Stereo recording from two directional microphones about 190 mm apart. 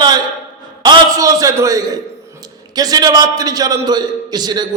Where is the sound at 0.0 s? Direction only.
20° right (ahead or behind).